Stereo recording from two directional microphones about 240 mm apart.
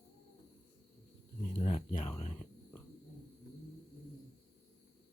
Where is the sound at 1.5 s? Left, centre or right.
Left.